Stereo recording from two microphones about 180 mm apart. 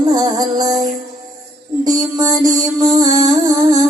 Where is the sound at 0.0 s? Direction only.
20° right (ahead or behind).